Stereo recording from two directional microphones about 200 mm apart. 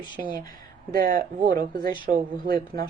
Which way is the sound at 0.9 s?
45° right (ahead or behind).